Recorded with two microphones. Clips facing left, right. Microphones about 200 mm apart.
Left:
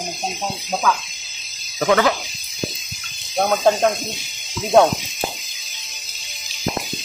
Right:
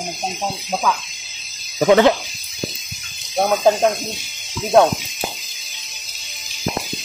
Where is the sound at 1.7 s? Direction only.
25° right (ahead or behind).